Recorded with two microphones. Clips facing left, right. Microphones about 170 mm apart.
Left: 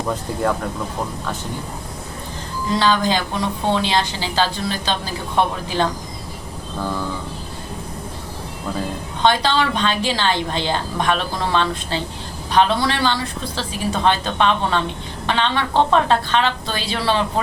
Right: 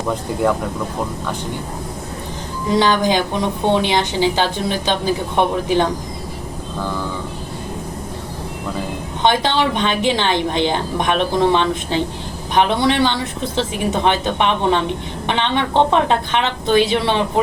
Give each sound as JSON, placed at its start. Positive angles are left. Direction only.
{"t": 2.7, "sound": "a woman's voice", "side_deg": -20}
{"t": 9.2, "sound": "a woman's voice", "side_deg": -20}